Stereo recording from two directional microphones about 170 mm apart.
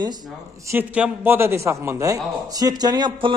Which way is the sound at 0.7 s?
10° right (ahead or behind).